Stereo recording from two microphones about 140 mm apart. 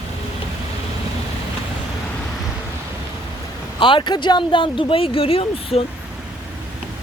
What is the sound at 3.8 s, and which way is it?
Speech, 35° left (ahead or behind).